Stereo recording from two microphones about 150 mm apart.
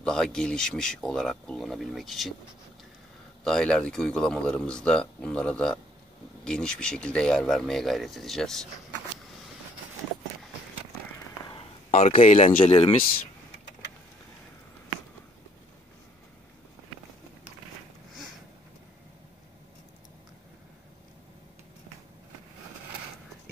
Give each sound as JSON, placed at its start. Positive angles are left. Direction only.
{"t": 0.0, "sound": "speech", "side_deg": 5}
{"t": 3.4, "sound": "speech", "side_deg": 5}
{"t": 11.5, "sound": "a sound", "side_deg": 40}
{"t": 12.4, "sound": "speech", "side_deg": 35}